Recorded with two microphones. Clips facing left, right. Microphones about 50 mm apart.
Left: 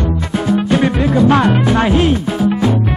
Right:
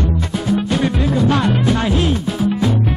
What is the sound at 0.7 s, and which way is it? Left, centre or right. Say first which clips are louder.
Music: left 4 dB; left.